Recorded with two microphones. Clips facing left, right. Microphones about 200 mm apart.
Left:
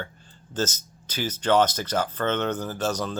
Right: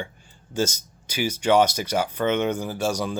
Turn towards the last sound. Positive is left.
turn(degrees=-10)  # may be behind; listen again after turning